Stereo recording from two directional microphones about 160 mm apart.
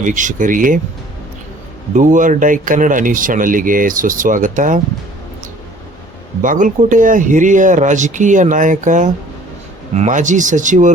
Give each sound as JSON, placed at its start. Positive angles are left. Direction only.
{"t": 0.0, "sound": "speech", "side_deg": -55}
{"t": 2.0, "sound": "speech", "side_deg": -55}
{"t": 6.4, "sound": "speech", "side_deg": -55}